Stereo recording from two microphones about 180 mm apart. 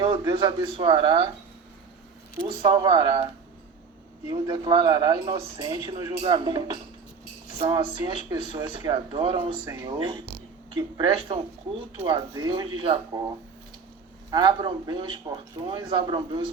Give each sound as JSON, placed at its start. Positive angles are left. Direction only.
{"t": 0.0, "sound": "speech", "side_deg": -25}
{"t": 2.6, "sound": "speech", "side_deg": -25}
{"t": 4.3, "sound": "speech", "side_deg": -25}